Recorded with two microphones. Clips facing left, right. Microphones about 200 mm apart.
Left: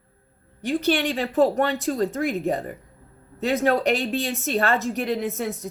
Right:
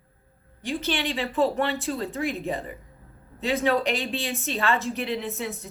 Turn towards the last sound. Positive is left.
turn(degrees=40)  # may be behind; listen again after turning